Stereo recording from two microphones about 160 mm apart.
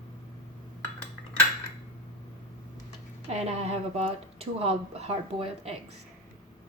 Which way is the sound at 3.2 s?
40° right (ahead or behind).